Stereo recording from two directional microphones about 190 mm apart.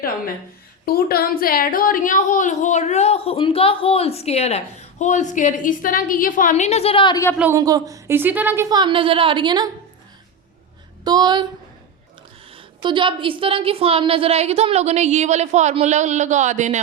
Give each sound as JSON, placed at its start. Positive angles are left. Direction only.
{"t": 0.9, "sound": "a woman's voice", "side_deg": 55}
{"t": 7.3, "sound": "a woman's voice", "side_deg": -10}
{"t": 8.7, "sound": "a woman's voice", "side_deg": -25}
{"t": 11.0, "sound": "speech", "side_deg": -20}
{"t": 12.5, "sound": "a woman's voice", "side_deg": -25}